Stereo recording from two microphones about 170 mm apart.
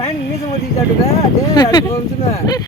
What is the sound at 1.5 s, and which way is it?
Speech, 25° left (ahead or behind).